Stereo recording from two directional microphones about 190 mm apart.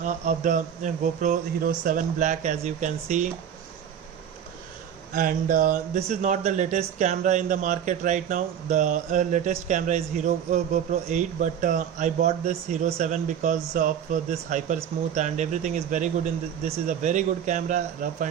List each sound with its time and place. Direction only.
0.0 s speech: 40° right (ahead or behind)
5.1 s speech: 45° right (ahead or behind)